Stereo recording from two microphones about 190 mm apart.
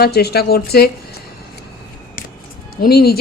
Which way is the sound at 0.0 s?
55° left (ahead or behind).